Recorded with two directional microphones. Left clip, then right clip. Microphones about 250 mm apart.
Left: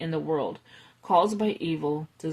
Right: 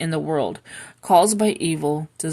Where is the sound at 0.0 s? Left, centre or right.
Right.